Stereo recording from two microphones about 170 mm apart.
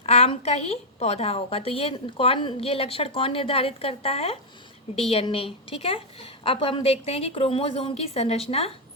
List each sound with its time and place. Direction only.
0.0 s a woman's voice: 40° left (ahead or behind)